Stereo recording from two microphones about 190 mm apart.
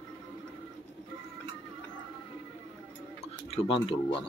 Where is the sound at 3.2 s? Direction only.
30° left (ahead or behind).